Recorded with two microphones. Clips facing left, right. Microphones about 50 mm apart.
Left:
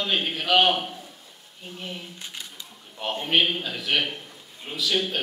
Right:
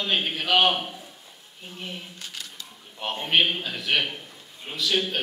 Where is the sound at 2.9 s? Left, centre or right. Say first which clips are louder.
Even; centre.